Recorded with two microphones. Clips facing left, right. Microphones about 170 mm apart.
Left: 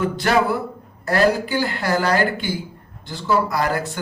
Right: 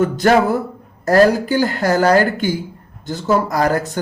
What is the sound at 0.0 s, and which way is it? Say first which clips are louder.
Speech: right 5 dB; 45° right (ahead or behind).